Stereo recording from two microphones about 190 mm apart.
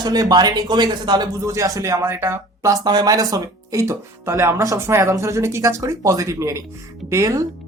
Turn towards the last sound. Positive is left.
turn(degrees=-15)  # may be behind; listen again after turning